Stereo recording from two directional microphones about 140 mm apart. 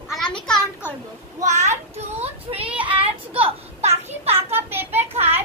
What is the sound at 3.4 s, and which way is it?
Children playing, 50° right (ahead or behind).